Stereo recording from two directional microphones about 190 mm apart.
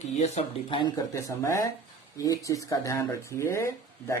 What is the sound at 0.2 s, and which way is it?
Speech, 30° left (ahead or behind).